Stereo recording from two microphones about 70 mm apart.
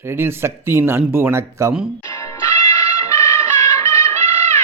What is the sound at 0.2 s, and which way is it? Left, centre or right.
Speech, right.